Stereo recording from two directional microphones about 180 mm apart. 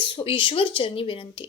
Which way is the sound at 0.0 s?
30° left (ahead or behind).